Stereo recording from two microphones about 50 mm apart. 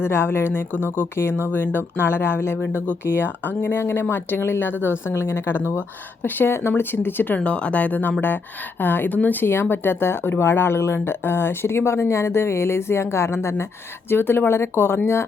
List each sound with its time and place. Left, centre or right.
0.0 s speech: left
1.5 s speech: left
7.3 s speech: left
14.1 s speech: left